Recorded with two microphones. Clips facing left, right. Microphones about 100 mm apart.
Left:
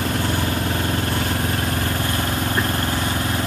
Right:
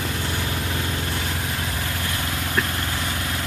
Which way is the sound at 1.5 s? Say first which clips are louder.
Left 5 dB; 50° left (ahead or behind).